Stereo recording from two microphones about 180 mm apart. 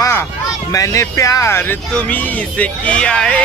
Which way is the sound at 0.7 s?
15° left (ahead or behind).